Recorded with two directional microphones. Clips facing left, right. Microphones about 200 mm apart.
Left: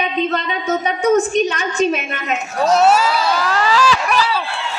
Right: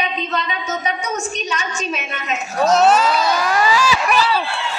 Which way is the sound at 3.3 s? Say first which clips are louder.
Even; 15° right (ahead or behind).